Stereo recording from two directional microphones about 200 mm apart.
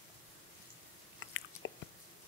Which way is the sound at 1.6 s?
70° left (ahead or behind).